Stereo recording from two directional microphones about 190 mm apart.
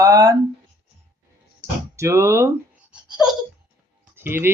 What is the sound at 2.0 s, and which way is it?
Speech, 15° right (ahead or behind).